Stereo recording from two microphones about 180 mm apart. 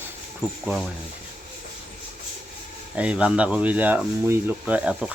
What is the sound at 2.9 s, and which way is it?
Speech, 5° right (ahead or behind).